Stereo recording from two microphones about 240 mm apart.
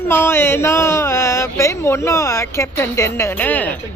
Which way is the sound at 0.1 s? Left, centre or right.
Centre.